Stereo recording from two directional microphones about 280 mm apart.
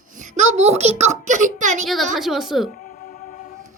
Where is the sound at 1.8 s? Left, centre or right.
Centre.